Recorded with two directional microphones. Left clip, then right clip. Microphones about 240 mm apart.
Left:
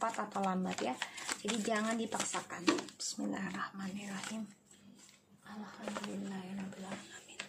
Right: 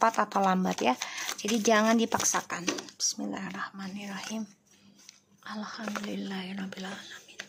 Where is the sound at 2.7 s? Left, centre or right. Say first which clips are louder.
Even; centre.